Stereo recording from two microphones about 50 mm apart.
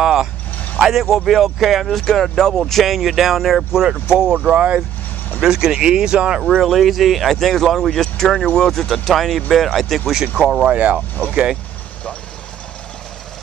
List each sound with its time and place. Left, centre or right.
0.0 s vehicle: centre
0.7 s speech: centre
3.7 s speech: centre
5.4 s speech: centre
6.6 s speech: centre
10.6 s speech: right